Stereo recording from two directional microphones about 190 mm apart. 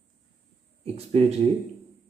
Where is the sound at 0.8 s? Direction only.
30° right (ahead or behind).